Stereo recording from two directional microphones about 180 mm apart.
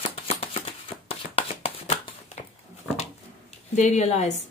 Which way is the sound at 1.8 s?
35° left (ahead or behind).